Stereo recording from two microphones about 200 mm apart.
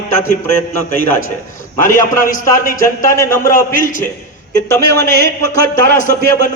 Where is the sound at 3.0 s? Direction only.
15° left (ahead or behind).